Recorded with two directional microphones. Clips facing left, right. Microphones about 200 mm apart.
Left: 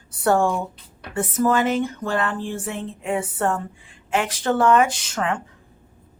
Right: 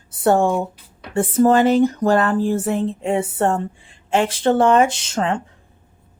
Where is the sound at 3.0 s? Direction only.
30° right (ahead or behind).